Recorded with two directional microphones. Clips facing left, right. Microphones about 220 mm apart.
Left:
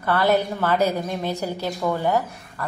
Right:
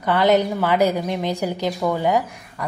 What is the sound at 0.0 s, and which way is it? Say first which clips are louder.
A woman's voice: right 3 dB; 15° right (ahead or behind).